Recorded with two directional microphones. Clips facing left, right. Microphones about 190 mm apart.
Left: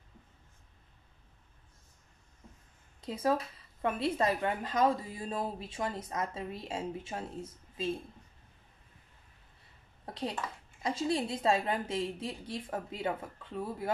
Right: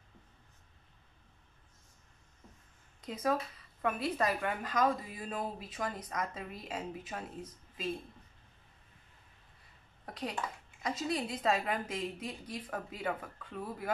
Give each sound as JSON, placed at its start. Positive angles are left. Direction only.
{"t": 3.1, "sound": "a woman's voice", "side_deg": 30}
{"t": 10.0, "sound": "a sound", "side_deg": 25}
{"t": 10.8, "sound": "a woman's voice", "side_deg": 30}